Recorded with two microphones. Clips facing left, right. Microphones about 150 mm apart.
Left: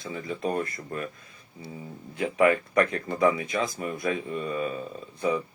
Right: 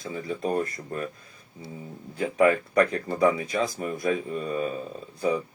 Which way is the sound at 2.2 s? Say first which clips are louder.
Right 1 dB; 35° right (ahead or behind).